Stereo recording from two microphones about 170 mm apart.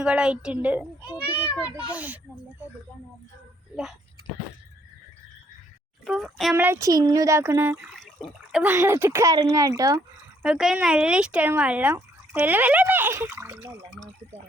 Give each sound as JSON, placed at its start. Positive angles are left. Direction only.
{"t": 0.0, "sound": "speech", "side_deg": -5}
{"t": 6.1, "sound": "a child's voice", "side_deg": 0}
{"t": 6.6, "sound": "speech", "side_deg": -15}
{"t": 7.9, "sound": "water", "side_deg": 0}
{"t": 8.6, "sound": "speech", "side_deg": -15}
{"t": 10.4, "sound": "speech", "side_deg": -5}